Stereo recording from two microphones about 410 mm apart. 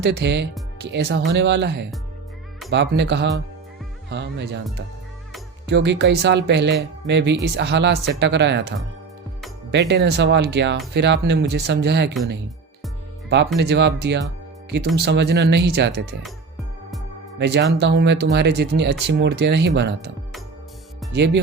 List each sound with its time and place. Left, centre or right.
0.0 s speech: right
5.6 s speech: right
9.7 s speech: right
13.6 s speech: right
17.4 s speech: right
21.1 s speech: right